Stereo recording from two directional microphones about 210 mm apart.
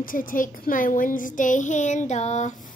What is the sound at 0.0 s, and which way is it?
Speech, 40° left (ahead or behind).